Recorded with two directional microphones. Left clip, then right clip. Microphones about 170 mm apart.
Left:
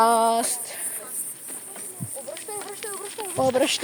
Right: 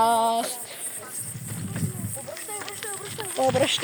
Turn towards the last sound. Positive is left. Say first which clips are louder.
# left 1 dB
turn(degrees=35)  # may be behind; listen again after turning